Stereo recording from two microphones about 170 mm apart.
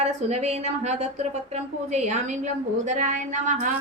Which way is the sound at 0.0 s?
40° right (ahead or behind).